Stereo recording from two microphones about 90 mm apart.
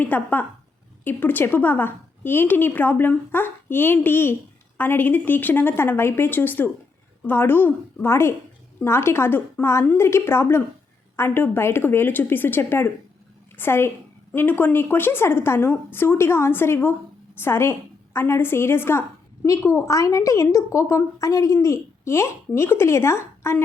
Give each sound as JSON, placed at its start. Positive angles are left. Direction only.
{"t": 0.0, "sound": "a woman's voice", "side_deg": 20}